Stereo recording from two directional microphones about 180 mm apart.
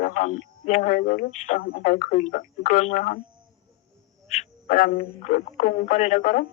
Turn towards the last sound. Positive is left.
turn(degrees=50)  # may be behind; listen again after turning